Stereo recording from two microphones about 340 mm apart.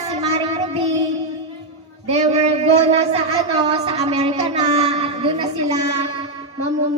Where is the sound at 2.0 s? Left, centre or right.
Centre.